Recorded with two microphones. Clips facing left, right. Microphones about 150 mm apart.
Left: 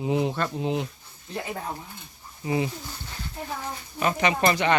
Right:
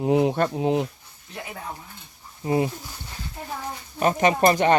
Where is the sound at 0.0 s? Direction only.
55° right (ahead or behind).